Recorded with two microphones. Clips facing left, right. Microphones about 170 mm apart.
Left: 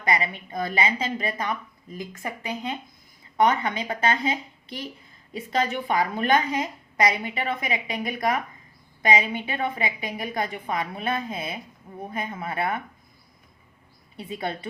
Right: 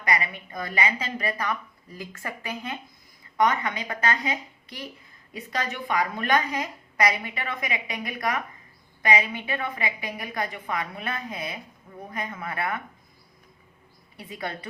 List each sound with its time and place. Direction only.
0.0 s a woman's voice: 25° left (ahead or behind)
14.2 s a woman's voice: 25° left (ahead or behind)